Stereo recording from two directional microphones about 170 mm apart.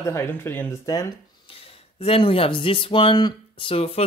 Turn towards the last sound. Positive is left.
turn(degrees=35)  # may be behind; listen again after turning